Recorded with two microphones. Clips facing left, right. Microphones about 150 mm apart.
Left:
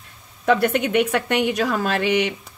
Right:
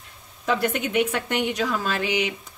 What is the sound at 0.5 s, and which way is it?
A woman's voice, 65° left (ahead or behind).